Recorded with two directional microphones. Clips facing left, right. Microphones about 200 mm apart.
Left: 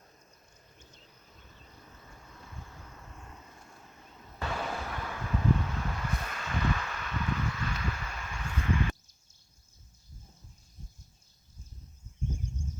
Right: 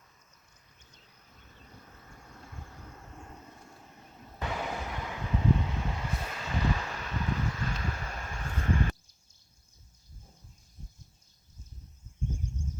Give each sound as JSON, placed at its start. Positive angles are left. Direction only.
{"t": 4.4, "sound": "vehicle", "side_deg": -15}